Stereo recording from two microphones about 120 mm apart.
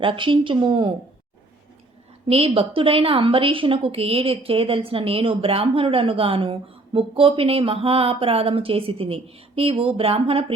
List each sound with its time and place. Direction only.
0.0 s a woman's voice: 45° right (ahead or behind)
2.3 s a woman's voice: 55° right (ahead or behind)